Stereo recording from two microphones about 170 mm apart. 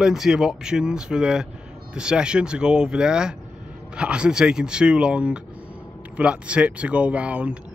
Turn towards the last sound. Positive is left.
turn(degrees=-5)  # may be behind; listen again after turning